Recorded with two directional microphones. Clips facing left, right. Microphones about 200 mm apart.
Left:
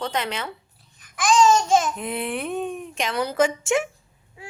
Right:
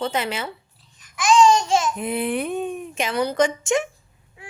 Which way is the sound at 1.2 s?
50° left (ahead or behind).